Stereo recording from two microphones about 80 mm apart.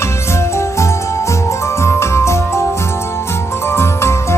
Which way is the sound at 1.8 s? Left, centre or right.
Left.